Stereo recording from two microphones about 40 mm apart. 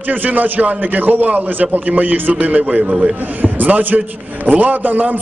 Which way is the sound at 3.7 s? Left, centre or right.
Right.